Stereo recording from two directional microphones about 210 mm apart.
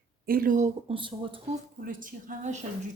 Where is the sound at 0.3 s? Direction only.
40° right (ahead or behind); by 1.4 s 25° right (ahead or behind).